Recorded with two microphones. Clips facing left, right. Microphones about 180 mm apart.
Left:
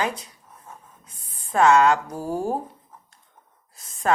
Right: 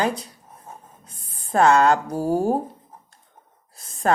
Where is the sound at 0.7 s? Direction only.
35° right (ahead or behind).